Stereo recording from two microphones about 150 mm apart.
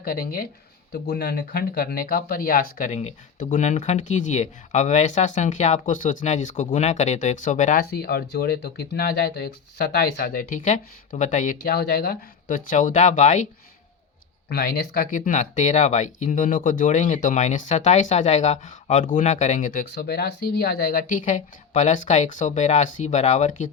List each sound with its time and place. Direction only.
0.0 s speech: 80° left
0.9 s speech: 90° left; by 7.8 s 55° left (ahead or behind)
7.8 s speech: 90° left; by 11.5 s 55° left (ahead or behind)
11.6 s speech: 90° left; by 13.5 s 55° left (ahead or behind)
14.5 s speech: 80° left; by 19.8 s 55° left (ahead or behind)
19.9 s speech: 90° left; by 23.6 s 55° left (ahead or behind)